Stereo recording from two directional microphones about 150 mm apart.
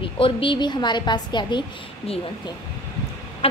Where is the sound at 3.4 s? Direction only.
40° left (ahead or behind).